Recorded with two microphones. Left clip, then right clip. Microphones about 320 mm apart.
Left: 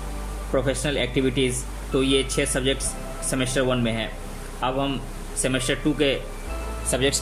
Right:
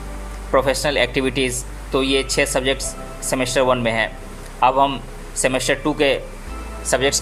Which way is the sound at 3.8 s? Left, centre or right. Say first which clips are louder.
Right 8 dB; centre.